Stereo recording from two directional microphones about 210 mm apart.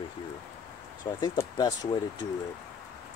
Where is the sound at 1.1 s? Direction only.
20° left (ahead or behind).